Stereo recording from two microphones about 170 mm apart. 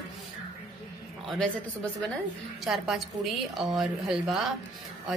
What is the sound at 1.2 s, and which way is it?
A woman's voice, 5° left (ahead or behind).